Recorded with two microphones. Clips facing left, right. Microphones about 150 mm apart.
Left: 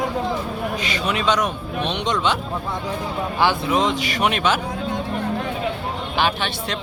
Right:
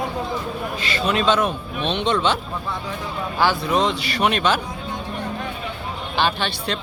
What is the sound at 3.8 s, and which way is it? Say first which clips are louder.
Speech: even; 15° left (ahead or behind).